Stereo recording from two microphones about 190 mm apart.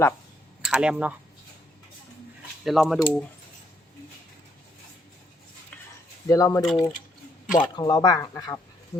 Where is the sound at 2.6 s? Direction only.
Centre (ahead or behind).